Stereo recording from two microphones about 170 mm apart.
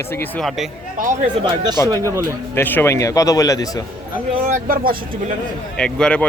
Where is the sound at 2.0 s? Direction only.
15° right (ahead or behind).